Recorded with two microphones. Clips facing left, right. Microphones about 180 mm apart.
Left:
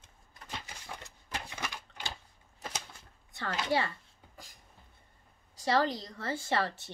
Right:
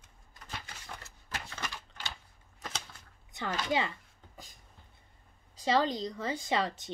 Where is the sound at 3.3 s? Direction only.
20° right (ahead or behind).